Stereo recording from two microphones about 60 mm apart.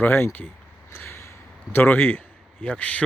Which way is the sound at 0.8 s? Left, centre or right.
Left.